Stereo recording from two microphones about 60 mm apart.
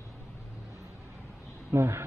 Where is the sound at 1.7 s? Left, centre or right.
Right.